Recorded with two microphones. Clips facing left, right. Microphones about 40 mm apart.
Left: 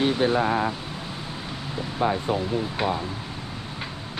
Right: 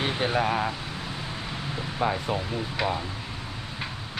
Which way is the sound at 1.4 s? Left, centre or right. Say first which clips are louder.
Left 1 dB; centre.